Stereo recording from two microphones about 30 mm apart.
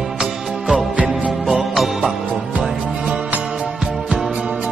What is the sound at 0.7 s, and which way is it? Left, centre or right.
Music, right.